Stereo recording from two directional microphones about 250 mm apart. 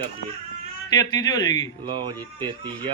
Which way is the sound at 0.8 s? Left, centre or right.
Centre.